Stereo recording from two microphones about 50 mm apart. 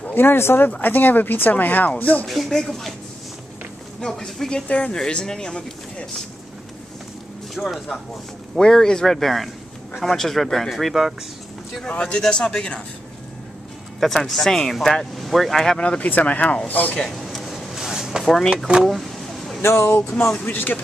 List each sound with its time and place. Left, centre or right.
0.0 s speech: left
0.7 s speech: left
2.2 s speech: centre
4.0 s speech: centre
7.5 s speech: centre
8.5 s speech: centre
11.9 s speech: left
13.9 s speech: centre
15.8 s speech: left
17.1 s a sound: centre
18.9 s vehicle: centre
19.6 s speech: left
20.4 s speech: left